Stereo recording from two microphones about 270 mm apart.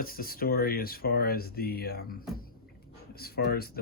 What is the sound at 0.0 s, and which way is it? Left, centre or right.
Speech, left.